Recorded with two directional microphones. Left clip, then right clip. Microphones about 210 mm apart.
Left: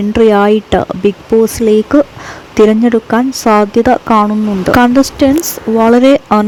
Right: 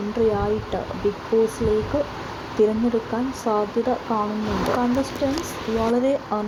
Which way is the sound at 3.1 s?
60° left (ahead or behind).